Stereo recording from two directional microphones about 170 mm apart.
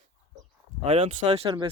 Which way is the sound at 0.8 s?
40° right (ahead or behind).